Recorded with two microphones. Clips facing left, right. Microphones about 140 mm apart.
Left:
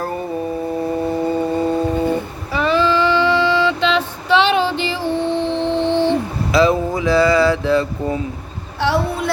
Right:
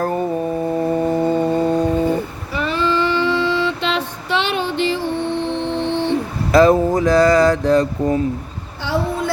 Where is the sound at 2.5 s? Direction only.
90° left.